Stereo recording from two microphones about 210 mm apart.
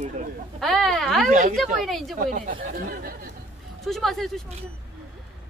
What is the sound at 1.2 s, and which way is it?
Speech, 35° right (ahead or behind).